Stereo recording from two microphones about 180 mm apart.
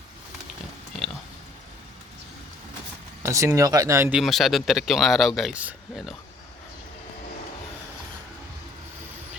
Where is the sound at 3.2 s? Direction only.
15° right (ahead or behind).